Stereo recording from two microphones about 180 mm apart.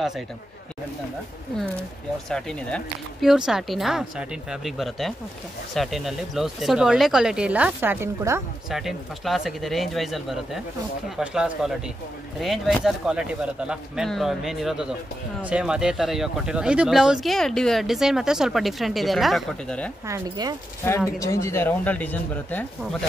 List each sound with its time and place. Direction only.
2.2 s speech: 5° left (ahead or behind); by 8.4 s 15° right (ahead or behind)
8.6 s speech: centre (ahead or behind)
20.1 s speech: 20° right (ahead or behind)
21.2 s speech: 15° left (ahead or behind)